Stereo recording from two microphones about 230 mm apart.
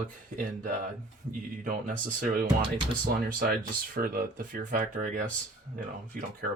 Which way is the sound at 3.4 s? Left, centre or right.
Right.